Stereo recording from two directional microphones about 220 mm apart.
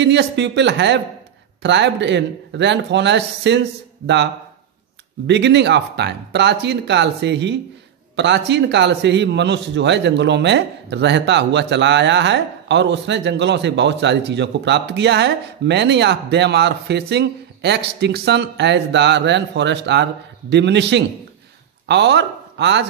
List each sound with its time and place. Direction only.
0.0 s a man's voice: 55° right (ahead or behind)
5.2 s a man's voice: 50° right (ahead or behind)